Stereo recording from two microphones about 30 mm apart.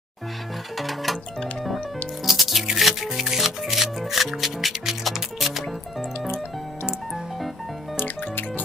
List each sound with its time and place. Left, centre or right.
0.7 s music: centre
2.2 s music: centre